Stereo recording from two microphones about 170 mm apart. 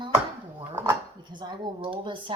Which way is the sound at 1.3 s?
25° right (ahead or behind).